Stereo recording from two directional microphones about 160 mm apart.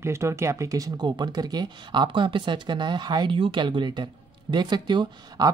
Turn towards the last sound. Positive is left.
turn(degrees=-30)  # may be behind; listen again after turning